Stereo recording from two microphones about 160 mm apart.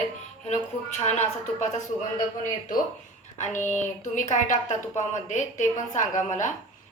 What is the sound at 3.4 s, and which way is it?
Speech, 50° left (ahead or behind).